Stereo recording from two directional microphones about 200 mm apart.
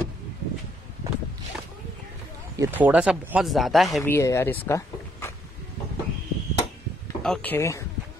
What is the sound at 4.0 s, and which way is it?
Speech, 15° left (ahead or behind).